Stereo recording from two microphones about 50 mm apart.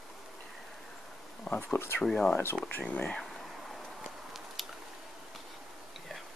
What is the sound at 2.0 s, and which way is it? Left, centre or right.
Speech, centre.